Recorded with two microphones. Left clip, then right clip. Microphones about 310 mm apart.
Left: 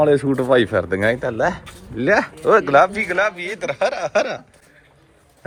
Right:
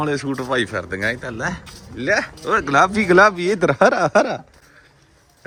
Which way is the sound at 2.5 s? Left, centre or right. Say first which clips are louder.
Left 2 dB; centre.